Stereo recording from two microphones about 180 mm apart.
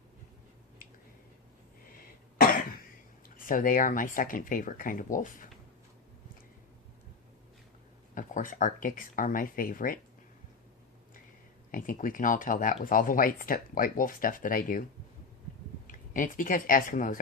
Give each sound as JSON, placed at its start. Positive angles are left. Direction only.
{"t": 3.2, "sound": "speech", "side_deg": 50}
{"t": 8.1, "sound": "speech", "side_deg": 45}
{"t": 11.7, "sound": "speech", "side_deg": 50}
{"t": 15.9, "sound": "speech", "side_deg": 50}